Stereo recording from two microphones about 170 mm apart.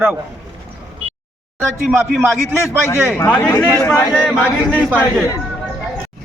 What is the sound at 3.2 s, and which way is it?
Speech, 25° left (ahead or behind).